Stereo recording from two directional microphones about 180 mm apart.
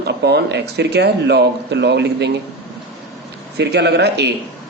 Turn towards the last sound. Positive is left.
turn(degrees=-65)  # may be behind; listen again after turning